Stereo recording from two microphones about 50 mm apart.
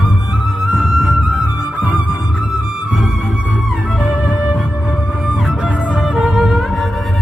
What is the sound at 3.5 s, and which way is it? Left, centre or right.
Music, right.